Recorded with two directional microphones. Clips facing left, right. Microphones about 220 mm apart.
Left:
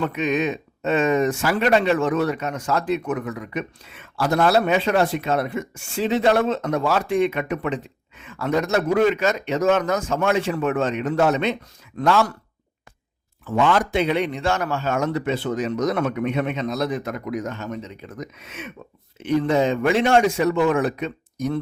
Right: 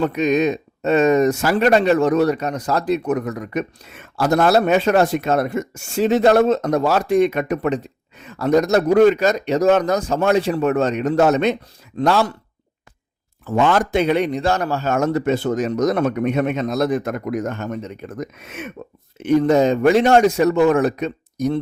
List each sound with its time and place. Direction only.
0.0 s speech: 40° right (ahead or behind)
11.9 s speech: 30° right (ahead or behind)
13.4 s a man's voice: 45° right (ahead or behind)